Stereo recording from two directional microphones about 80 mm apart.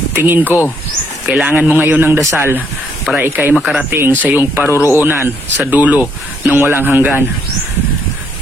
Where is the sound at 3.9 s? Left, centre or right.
Right.